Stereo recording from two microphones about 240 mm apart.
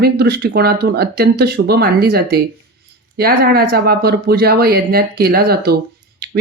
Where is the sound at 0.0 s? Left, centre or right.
Right.